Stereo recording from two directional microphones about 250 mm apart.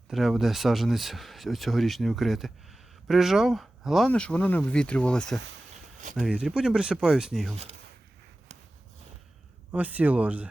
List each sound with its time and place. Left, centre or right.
0.1 s speech: centre
7.5 s speech: right
9.7 s speech: centre